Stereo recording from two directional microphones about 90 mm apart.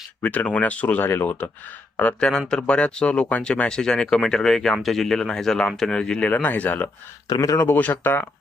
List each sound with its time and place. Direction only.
0.2 s speech: 15° left (ahead or behind)
7.3 s speech: 45° left (ahead or behind)
7.8 s speech: 20° left (ahead or behind)